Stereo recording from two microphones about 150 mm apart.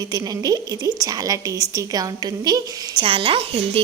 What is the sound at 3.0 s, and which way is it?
Speech, 35° right (ahead or behind).